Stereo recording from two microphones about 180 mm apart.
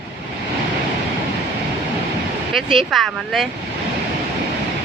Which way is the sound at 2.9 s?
Centre (ahead or behind).